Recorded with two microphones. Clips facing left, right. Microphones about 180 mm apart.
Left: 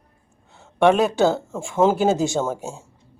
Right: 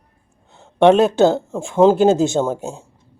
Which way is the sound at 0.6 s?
20° right (ahead or behind).